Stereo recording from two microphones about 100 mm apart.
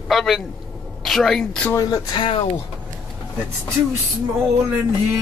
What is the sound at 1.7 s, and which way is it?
Speech, 35° left (ahead or behind).